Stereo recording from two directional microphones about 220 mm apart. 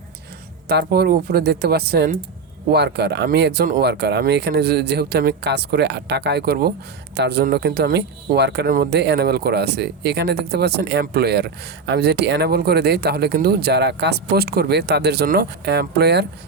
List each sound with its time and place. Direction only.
0.7 s speech: 45° right (ahead or behind)